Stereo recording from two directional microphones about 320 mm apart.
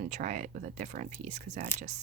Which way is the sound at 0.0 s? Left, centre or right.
Right.